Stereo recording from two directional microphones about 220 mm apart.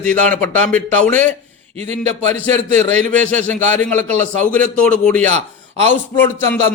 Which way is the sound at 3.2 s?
5° left (ahead or behind).